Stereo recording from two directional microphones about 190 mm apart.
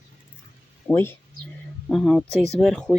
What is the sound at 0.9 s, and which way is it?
Speech, 10° left (ahead or behind).